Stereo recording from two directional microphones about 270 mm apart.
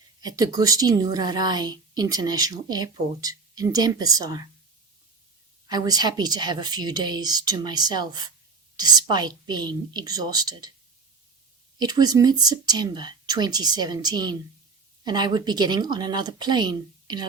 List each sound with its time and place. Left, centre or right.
0.2 s a woman's voice: centre
5.6 s a woman's voice: centre
11.8 s a woman's voice: centre